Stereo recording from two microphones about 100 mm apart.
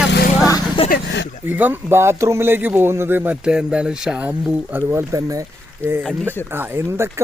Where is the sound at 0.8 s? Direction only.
65° left (ahead or behind).